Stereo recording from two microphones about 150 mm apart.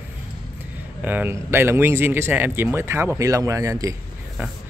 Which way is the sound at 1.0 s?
10° right (ahead or behind).